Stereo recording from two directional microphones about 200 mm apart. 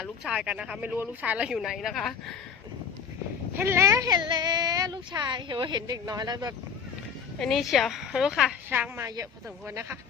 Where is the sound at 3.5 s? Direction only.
10° right (ahead or behind).